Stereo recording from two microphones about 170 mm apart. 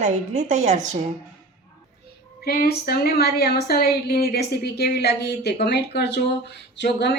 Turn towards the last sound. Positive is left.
turn(degrees=90)